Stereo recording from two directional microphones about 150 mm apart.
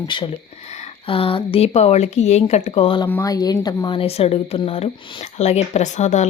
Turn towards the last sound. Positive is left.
turn(degrees=50)  # may be behind; listen again after turning